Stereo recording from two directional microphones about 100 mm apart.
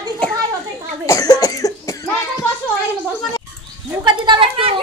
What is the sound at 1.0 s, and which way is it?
Cough, 35° left (ahead or behind).